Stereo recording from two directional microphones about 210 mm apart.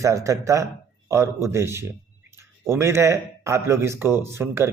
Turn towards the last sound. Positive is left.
turn(degrees=-10)  # may be behind; listen again after turning